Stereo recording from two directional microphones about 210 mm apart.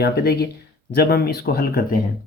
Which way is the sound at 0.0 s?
50° left (ahead or behind).